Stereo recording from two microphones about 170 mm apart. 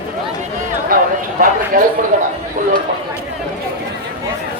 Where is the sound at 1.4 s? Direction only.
50° right (ahead or behind).